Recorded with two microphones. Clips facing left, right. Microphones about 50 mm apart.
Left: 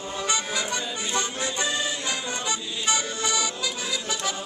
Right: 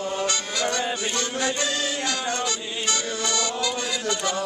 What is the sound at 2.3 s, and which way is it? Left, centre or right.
Music, centre.